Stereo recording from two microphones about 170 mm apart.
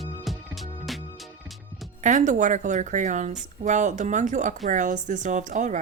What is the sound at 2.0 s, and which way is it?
Speech, 45° right (ahead or behind).